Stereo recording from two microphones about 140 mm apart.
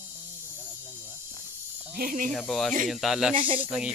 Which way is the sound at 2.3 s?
Centre (ahead or behind).